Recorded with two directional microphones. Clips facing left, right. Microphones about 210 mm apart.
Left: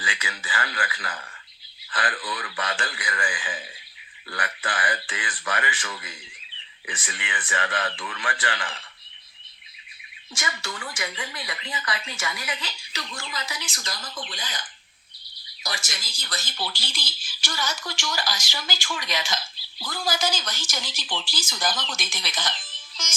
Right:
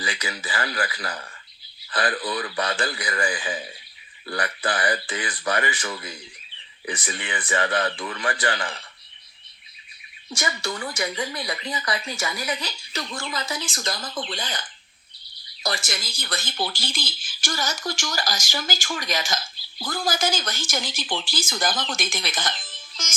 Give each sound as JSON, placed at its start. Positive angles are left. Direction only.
{"t": 0.0, "sound": "speech", "side_deg": -40}
{"t": 10.3, "sound": "speech", "side_deg": -40}
{"t": 12.9, "sound": "speech", "side_deg": -50}
{"t": 15.6, "sound": "speech", "side_deg": -60}